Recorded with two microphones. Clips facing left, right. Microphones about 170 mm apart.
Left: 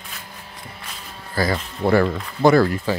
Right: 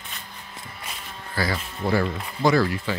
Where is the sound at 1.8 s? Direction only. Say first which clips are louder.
Left 6 dB; 60° left (ahead or behind).